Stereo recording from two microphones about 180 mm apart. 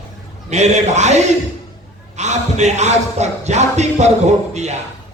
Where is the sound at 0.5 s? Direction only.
40° right (ahead or behind).